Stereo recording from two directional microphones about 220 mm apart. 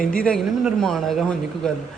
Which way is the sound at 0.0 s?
40° left (ahead or behind).